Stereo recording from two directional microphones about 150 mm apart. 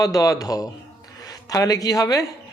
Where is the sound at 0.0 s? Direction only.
25° left (ahead or behind).